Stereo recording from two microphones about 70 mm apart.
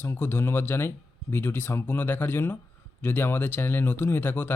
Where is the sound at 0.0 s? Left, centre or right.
Left.